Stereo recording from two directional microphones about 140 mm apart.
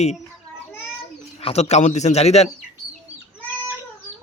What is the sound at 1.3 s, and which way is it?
A man's voice, 50° left (ahead or behind).